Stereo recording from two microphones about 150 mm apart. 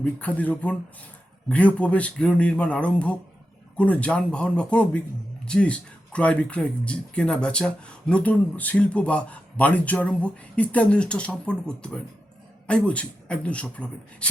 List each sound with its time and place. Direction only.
0.0 s speech: 10° left (ahead or behind)